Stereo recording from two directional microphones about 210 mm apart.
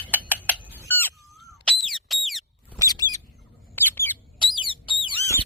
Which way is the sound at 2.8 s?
15° left (ahead or behind).